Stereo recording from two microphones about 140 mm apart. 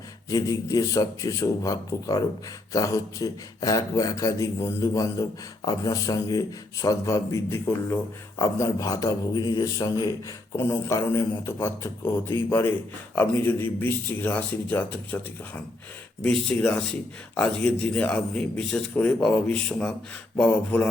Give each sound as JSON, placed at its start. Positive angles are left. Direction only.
{"t": 0.3, "sound": "a man's voice", "side_deg": 25}